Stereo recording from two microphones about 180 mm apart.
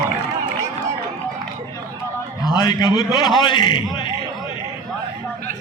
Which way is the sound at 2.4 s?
20° left (ahead or behind).